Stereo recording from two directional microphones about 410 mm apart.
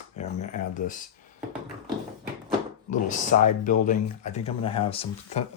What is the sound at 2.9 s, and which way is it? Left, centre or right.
Speech, centre.